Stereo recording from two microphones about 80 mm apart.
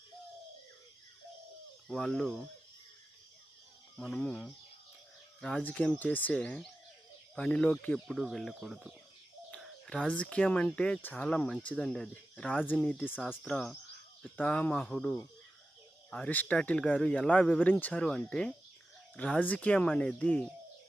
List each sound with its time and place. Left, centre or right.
1.9 s speech: centre
4.2 s speech: centre
5.4 s speech: centre
6.0 s speech: left
6.3 s speech: centre
7.9 s speech: centre